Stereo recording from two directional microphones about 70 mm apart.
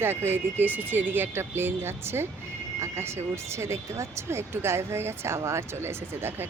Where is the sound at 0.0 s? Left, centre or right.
Right.